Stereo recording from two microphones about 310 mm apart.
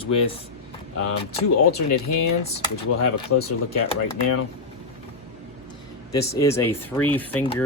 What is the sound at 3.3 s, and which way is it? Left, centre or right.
Speech, left.